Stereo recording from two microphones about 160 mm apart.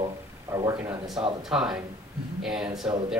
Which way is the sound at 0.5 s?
20° right (ahead or behind).